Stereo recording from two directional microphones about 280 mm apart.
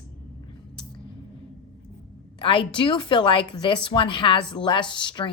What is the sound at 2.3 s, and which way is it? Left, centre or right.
A woman's voice, centre.